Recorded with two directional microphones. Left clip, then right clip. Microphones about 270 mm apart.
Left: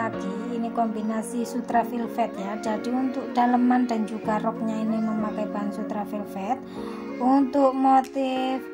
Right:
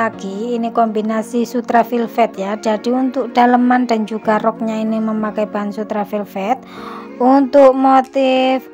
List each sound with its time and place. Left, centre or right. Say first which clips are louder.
0.0 s a woman's voice: right 9 dB; right